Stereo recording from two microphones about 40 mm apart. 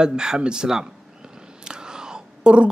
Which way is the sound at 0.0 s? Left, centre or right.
Centre.